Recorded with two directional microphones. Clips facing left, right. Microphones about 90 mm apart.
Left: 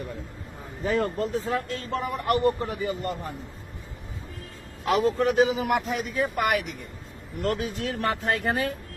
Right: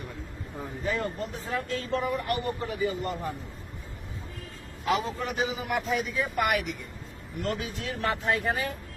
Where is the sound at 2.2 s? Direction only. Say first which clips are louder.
Left 7 dB; 65° left (ahead or behind).